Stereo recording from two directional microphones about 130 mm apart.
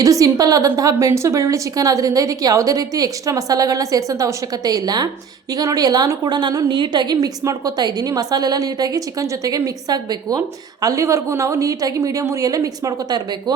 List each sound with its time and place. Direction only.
0.0 s a woman's voice: 25° right (ahead or behind)